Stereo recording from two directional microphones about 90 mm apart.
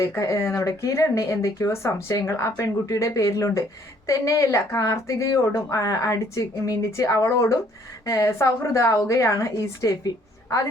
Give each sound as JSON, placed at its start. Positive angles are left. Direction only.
{"t": 0.0, "sound": "speech", "side_deg": 35}